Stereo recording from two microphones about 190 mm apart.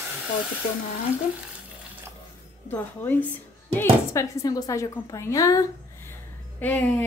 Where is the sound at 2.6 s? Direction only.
10° left (ahead or behind).